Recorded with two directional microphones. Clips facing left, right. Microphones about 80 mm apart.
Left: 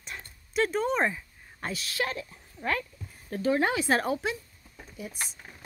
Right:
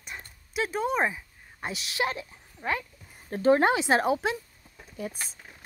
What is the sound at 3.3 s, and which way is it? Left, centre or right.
Speech, right.